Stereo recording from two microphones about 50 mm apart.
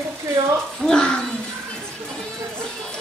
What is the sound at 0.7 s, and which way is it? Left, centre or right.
Speech, centre.